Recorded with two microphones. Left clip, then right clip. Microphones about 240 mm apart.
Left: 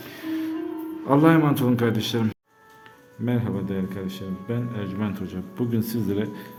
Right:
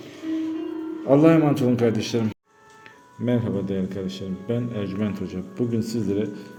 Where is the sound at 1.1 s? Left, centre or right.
Centre.